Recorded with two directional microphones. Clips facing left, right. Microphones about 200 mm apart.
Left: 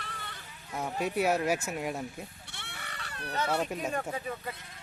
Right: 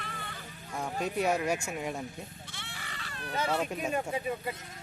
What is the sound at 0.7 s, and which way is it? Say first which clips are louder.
Speech: left 1 dB; 5° left (ahead or behind).